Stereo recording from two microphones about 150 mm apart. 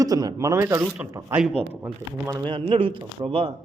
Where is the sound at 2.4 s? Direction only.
35° right (ahead or behind).